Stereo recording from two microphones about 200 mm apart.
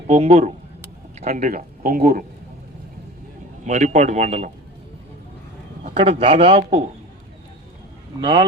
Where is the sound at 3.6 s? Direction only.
35° right (ahead or behind).